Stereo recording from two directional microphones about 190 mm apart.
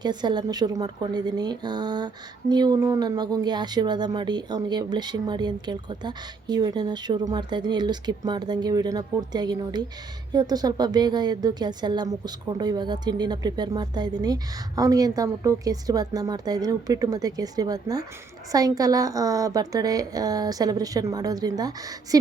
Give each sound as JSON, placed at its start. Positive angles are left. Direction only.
{"t": 0.0, "sound": "speech", "side_deg": -20}